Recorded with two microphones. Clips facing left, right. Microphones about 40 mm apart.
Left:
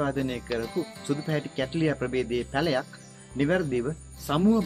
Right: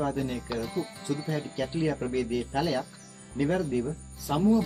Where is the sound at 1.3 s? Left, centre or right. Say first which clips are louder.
Left 2 dB; left.